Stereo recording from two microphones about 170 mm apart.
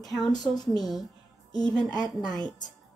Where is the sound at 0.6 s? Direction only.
25° left (ahead or behind).